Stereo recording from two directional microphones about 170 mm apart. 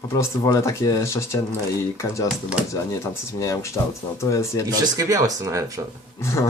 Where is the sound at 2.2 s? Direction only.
5° right (ahead or behind).